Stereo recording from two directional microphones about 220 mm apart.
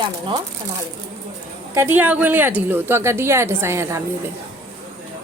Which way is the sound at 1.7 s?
10° right (ahead or behind).